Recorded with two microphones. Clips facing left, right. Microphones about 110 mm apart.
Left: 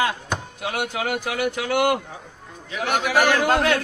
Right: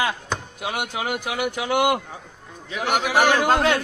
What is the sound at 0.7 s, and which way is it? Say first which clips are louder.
A man's voice: left 2 dB; 20° right (ahead or behind).